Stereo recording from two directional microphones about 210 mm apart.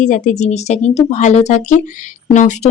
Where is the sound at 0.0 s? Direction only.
35° left (ahead or behind).